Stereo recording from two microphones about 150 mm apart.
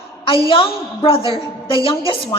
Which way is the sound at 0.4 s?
35° left (ahead or behind).